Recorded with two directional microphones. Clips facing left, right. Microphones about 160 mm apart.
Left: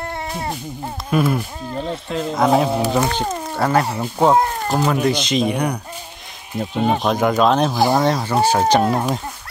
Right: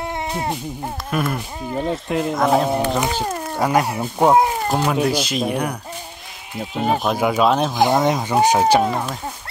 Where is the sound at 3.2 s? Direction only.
10° left (ahead or behind).